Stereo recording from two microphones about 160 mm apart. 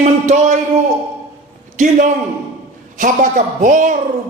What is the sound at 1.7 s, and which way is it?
Speech, 50° right (ahead or behind).